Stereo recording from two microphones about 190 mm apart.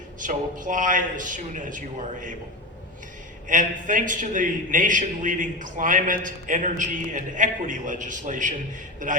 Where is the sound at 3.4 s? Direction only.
45° right (ahead or behind).